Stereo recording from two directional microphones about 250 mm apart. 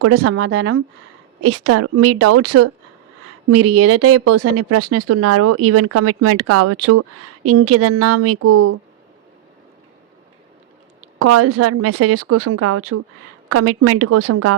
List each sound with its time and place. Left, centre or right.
0.0 s speech: right
0.3 s speech: right
1.4 s speech: right
11.2 s speech: right